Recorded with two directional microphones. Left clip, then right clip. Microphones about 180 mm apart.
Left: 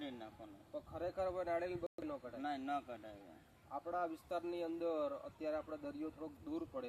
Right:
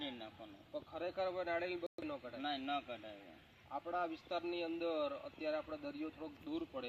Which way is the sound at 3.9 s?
15° left (ahead or behind).